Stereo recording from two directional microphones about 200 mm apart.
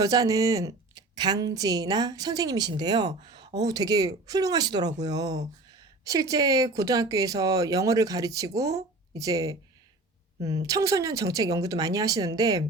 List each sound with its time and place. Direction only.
0.0 s a woman's voice: 15° right (ahead or behind)